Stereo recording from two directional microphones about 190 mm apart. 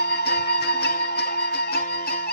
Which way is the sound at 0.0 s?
60° left (ahead or behind).